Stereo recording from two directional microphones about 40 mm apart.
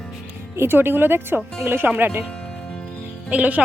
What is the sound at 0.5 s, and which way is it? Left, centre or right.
Speech, right.